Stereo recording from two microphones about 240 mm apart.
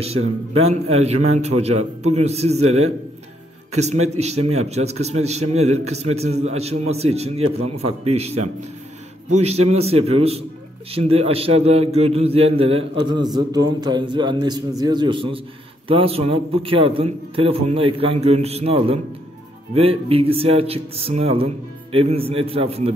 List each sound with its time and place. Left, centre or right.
0.0 s a man's voice: right
3.7 s a man's voice: right